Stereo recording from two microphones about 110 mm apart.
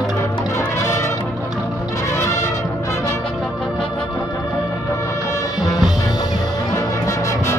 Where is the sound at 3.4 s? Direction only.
5° left (ahead or behind).